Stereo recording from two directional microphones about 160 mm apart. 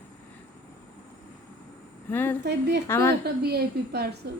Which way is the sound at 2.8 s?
15° left (ahead or behind).